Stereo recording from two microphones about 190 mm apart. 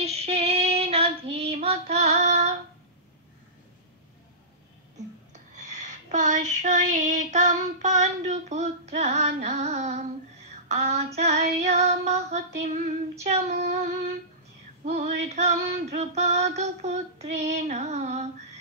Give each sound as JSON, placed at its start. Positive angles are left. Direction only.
{"t": 0.0, "sound": "female singing", "side_deg": -35}
{"t": 5.6, "sound": "female singing", "side_deg": -40}